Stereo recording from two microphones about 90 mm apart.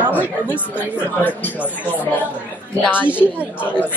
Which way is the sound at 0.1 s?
20° left (ahead or behind).